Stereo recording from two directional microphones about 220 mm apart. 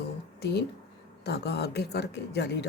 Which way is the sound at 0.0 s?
50° left (ahead or behind).